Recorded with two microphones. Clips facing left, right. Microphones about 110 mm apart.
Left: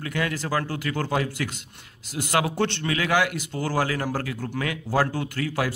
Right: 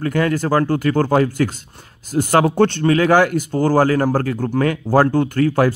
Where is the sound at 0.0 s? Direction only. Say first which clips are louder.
Right 10 dB; 45° right (ahead or behind).